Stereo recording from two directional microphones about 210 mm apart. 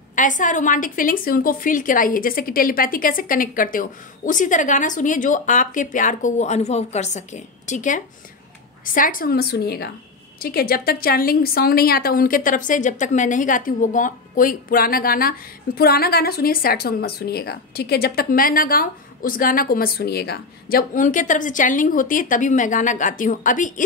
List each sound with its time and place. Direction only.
0.1 s a woman's voice: 35° left (ahead or behind)